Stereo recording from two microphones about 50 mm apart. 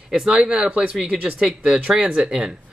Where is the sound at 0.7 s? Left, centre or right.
Right.